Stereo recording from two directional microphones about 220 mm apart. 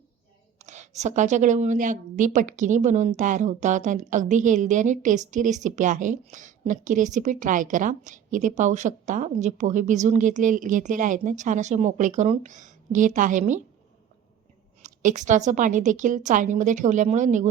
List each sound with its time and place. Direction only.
0.6 s a woman's voice: 30° right (ahead or behind)
14.8 s a woman's voice: 35° right (ahead or behind)